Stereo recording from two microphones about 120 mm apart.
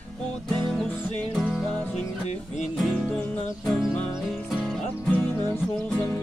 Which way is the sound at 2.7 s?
Centre (ahead or behind).